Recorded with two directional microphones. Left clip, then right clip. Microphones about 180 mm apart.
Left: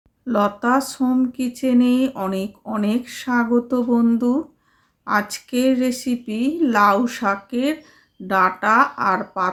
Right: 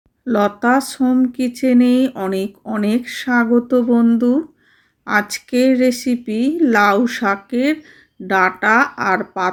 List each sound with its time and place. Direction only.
0.3 s speech: 15° right (ahead or behind)